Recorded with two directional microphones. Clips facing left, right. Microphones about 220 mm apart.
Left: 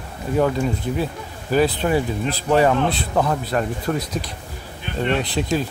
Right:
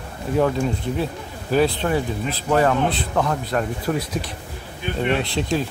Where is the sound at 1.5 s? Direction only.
5° left (ahead or behind).